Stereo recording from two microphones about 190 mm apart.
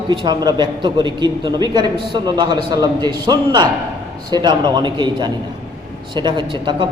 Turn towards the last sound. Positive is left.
turn(degrees=-25)  # may be behind; listen again after turning